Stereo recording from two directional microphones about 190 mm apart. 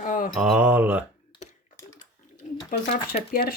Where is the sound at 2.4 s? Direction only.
40° left (ahead or behind).